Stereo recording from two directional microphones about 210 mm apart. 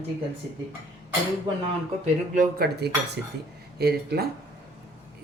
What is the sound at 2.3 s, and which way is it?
Speech, 50° right (ahead or behind).